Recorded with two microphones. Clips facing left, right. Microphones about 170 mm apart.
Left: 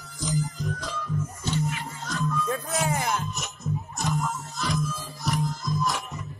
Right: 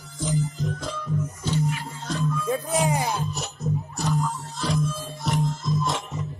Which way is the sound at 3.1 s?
35° right (ahead or behind).